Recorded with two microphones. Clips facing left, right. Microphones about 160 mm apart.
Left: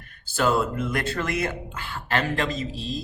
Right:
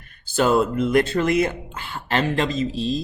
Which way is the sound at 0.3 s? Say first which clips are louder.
Right 5 dB; 20° right (ahead or behind).